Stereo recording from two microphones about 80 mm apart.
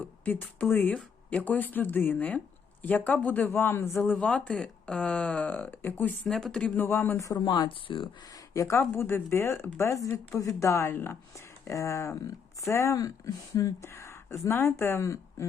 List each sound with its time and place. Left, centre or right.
0.0 s speech: left
6.2 s speech: centre
6.7 s speech: left
7.3 s speech: left
8.2 s speech: left
8.8 s speech: left